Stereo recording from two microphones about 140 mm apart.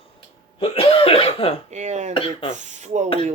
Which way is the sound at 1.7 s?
55° right (ahead or behind).